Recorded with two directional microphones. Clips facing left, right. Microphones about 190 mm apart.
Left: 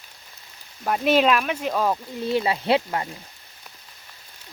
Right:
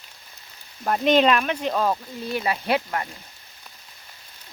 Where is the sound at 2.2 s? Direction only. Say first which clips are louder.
Left 3 dB; 25° left (ahead or behind).